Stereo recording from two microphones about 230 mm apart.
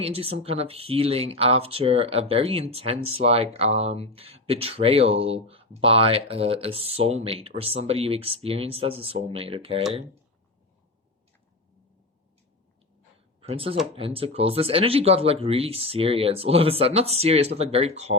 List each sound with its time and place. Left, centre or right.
0.0 s speech: right
13.4 s speech: right